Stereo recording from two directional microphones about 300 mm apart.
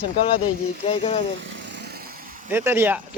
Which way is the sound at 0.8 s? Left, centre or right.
Centre.